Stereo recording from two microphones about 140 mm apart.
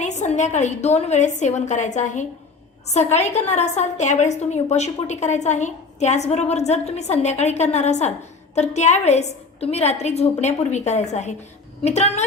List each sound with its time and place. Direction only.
0.0 s a woman's voice: 55° left (ahead or behind)